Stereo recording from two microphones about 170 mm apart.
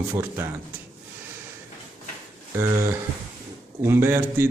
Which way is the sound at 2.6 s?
15° right (ahead or behind).